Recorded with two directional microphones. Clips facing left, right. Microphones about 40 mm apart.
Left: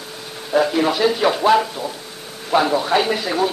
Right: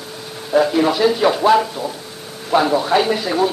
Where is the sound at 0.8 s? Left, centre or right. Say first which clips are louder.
Right 2 dB; left.